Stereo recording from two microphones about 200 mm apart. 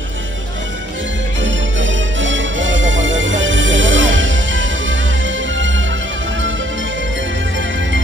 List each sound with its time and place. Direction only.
1.4 s music: 70° right (ahead or behind)